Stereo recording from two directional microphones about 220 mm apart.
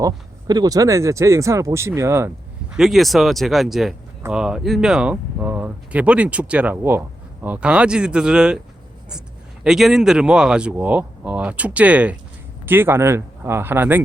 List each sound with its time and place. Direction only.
0.0 s speech: 15° right (ahead or behind)
2.7 s speech: centre (ahead or behind)
9.6 s speech: centre (ahead or behind)